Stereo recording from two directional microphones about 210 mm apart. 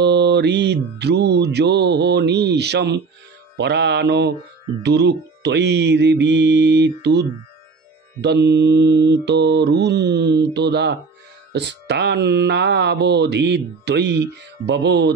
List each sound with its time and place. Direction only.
0.0 s mantra: 55° right (ahead or behind)
3.5 s speech: 55° right (ahead or behind)
4.8 s mantra: 55° right (ahead or behind)
11.5 s speech: 55° right (ahead or behind)